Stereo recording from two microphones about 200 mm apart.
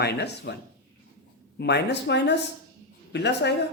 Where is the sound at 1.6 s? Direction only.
55° left (ahead or behind).